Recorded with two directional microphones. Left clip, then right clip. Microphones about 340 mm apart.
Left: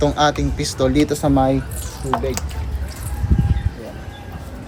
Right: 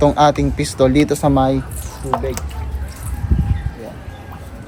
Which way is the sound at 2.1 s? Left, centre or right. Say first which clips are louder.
Right 1 dB; centre.